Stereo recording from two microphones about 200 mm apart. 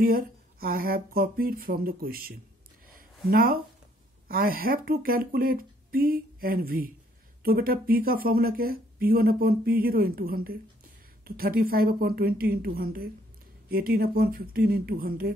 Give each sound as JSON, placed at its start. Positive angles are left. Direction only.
{"t": 0.0, "sound": "speech", "side_deg": -45}